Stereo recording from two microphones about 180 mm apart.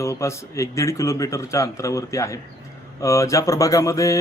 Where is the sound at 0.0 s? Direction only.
15° left (ahead or behind).